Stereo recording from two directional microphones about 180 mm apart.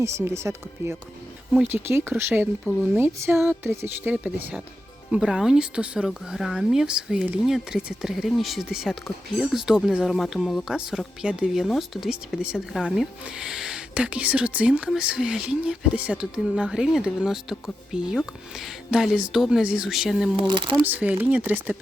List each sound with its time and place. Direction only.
0.0 s speech: 15° right (ahead or behind)